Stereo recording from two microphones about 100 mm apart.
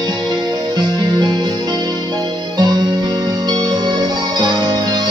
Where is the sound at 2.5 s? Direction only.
45° right (ahead or behind).